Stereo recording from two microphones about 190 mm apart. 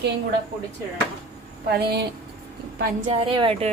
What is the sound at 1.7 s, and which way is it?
Speech, 60° right (ahead or behind).